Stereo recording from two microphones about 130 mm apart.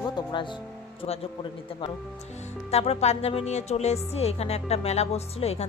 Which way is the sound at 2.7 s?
55° left (ahead or behind).